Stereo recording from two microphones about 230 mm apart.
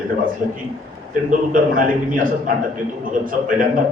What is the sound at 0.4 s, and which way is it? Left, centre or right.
A man's voice, right.